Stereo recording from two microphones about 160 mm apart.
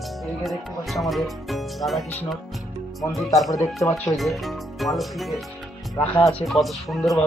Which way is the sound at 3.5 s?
20° left (ahead or behind).